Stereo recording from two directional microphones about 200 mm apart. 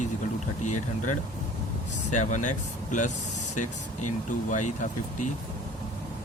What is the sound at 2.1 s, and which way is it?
Speech, 40° left (ahead or behind).